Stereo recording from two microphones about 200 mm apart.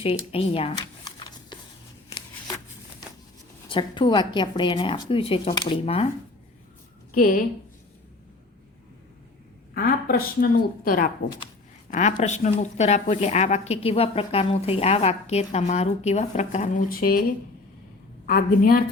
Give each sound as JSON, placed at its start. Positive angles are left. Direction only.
{"t": 0.0, "sound": "shuffling cards", "side_deg": 30}
{"t": 3.7, "sound": "a woman's voice", "side_deg": 25}
{"t": 7.1, "sound": "a woman's voice", "side_deg": 45}
{"t": 9.7, "sound": "a woman's voice", "side_deg": 45}
{"t": 18.3, "sound": "speech", "side_deg": 45}